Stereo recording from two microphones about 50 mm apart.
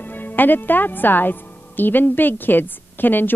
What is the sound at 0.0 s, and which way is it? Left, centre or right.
A woman's voice, left.